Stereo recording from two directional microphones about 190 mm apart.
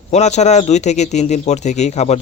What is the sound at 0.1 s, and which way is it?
Speech, 35° left (ahead or behind).